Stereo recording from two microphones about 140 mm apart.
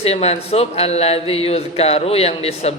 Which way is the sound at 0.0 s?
45° left (ahead or behind).